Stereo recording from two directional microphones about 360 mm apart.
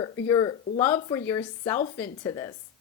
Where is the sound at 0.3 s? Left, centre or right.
Centre.